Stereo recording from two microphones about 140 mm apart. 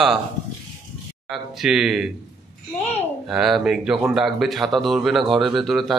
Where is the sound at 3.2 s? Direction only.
Centre (ahead or behind).